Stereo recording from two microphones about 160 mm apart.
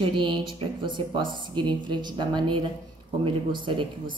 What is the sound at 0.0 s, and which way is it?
A woman's voice, 30° right (ahead or behind).